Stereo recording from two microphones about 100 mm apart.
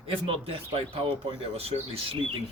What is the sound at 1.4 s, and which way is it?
Speech, 85° right.